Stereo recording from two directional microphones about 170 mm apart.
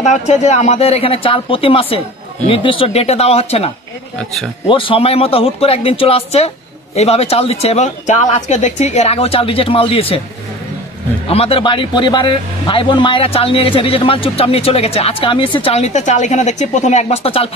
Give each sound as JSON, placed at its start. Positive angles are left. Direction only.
{"t": 0.0, "sound": "a man's voice", "side_deg": 40}
{"t": 11.2, "sound": "a man's voice", "side_deg": 35}